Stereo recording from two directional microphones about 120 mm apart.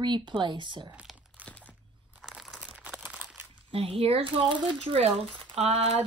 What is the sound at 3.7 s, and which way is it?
Speech, 55° right (ahead or behind).